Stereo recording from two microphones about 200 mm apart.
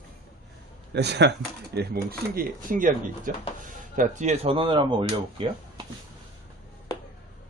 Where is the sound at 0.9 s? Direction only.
60° right (ahead or behind); by 5.8 s 25° right (ahead or behind).